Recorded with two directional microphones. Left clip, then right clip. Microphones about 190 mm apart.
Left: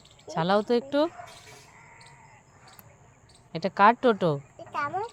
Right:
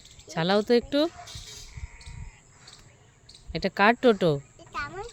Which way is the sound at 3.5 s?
25° right (ahead or behind).